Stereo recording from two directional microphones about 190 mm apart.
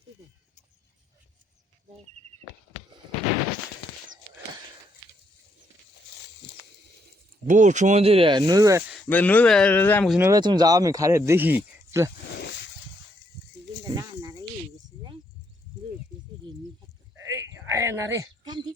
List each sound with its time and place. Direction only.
7.4 s speech: 40° right (ahead or behind); by 8.8 s 20° right (ahead or behind)
9.0 s speech: 10° left (ahead or behind)
10.1 s speech: 10° right (ahead or behind)
12.4 s a sound: 65° left (ahead or behind)
13.8 s snake: 20° right (ahead or behind)
17.2 s sheep: 15° right (ahead or behind)